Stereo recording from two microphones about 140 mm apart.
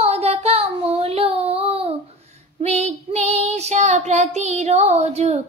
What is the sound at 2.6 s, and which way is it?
Female singing, 50° right (ahead or behind).